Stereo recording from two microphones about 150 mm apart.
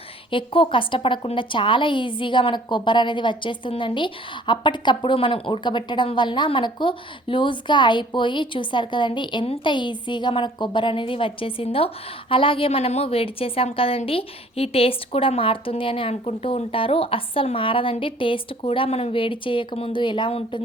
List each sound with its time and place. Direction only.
0.3 s a woman's voice: 35° left (ahead or behind)